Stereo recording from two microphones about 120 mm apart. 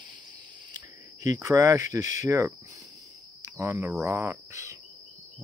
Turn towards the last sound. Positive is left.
turn(degrees=-20)  # may be behind; listen again after turning